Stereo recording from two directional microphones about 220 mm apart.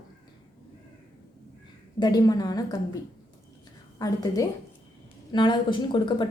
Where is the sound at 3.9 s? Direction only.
15° left (ahead or behind).